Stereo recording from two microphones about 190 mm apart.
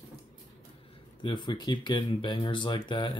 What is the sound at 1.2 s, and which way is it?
Speech, 25° left (ahead or behind).